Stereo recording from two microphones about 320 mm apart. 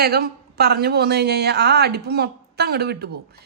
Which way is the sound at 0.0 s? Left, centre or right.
Right.